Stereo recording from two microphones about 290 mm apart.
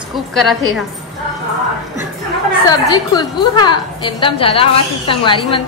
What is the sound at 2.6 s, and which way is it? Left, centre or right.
A woman's voice, centre.